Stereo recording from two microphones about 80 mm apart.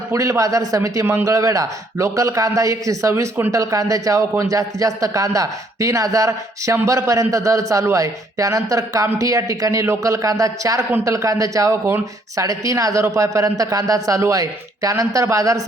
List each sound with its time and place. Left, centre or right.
0.1 s a man's voice: right